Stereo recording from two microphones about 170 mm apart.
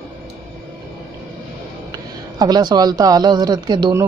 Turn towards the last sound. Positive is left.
turn(degrees=-25)  # may be behind; listen again after turning